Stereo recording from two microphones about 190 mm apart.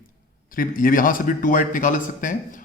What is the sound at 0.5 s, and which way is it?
Speech, 45° left (ahead or behind).